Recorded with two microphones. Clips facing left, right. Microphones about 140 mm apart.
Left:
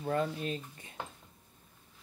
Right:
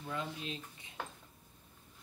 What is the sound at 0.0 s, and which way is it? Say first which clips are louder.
Speech: left 8 dB; 50° left (ahead or behind).